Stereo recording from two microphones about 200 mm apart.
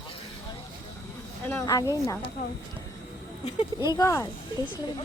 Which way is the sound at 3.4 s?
20° left (ahead or behind).